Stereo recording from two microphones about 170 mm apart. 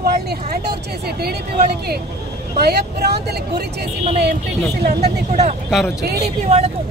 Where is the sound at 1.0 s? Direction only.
65° right (ahead or behind).